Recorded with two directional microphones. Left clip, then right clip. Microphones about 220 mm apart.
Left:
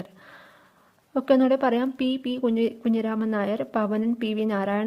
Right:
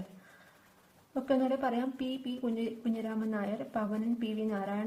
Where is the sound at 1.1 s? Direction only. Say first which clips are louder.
Left 10 dB; 45° left (ahead or behind).